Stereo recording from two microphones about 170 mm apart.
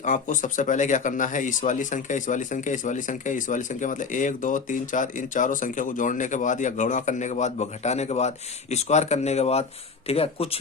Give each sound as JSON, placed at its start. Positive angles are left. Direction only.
{"t": 0.0, "sound": "speech", "side_deg": 50}